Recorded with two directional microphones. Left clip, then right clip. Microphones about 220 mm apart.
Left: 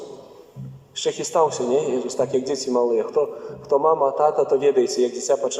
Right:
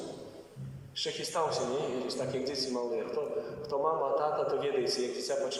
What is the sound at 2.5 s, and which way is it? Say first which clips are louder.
A man's voice: left 13 dB; 50° left (ahead or behind).